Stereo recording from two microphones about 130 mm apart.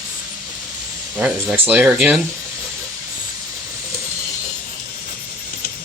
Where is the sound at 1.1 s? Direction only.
10° right (ahead or behind).